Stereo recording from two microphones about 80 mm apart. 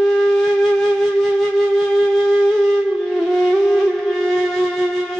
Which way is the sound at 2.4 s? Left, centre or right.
Centre.